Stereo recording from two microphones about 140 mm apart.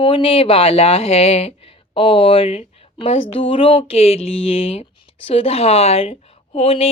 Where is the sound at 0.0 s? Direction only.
40° left (ahead or behind).